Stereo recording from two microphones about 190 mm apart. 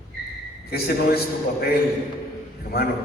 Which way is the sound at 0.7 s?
55° left (ahead or behind).